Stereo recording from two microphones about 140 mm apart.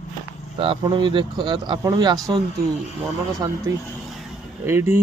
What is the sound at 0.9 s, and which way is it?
A man's voice, 35° right (ahead or behind).